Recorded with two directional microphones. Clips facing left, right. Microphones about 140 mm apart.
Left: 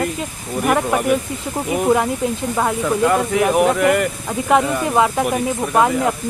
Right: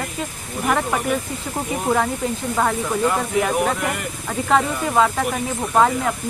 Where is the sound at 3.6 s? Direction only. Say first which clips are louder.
Left 7 dB; 65° left (ahead or behind).